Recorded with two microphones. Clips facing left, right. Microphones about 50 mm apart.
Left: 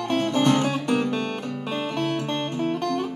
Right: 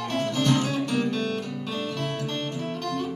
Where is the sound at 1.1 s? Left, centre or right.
Left.